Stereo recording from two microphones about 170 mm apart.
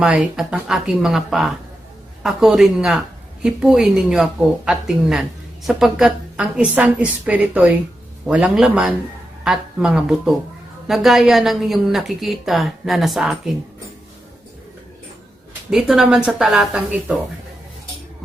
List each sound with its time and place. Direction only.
0.0 s a woman's voice: 5° right (ahead or behind)
15.7 s a woman's voice: centre (ahead or behind)